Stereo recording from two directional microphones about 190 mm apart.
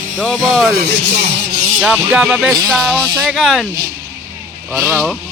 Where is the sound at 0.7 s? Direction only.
60° right (ahead or behind).